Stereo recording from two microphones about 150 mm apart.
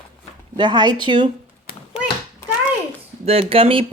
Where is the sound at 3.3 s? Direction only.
40° right (ahead or behind).